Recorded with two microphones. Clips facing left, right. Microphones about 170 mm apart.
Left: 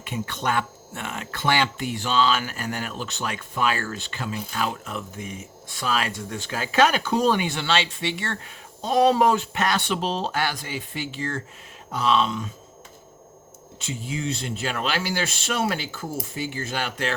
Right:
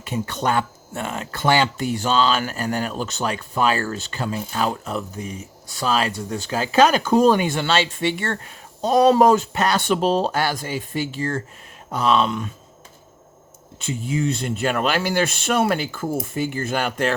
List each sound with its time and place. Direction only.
0.0 s speech: 40° right (ahead or behind); by 12.5 s 55° right (ahead or behind)
13.7 s speech: 55° right (ahead or behind)